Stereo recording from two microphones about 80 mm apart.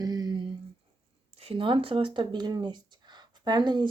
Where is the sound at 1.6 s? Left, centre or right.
Right.